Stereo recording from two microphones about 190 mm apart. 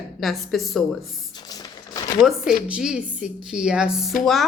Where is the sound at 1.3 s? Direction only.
20° left (ahead or behind).